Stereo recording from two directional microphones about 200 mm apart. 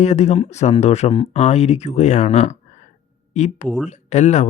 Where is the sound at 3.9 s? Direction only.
35° left (ahead or behind).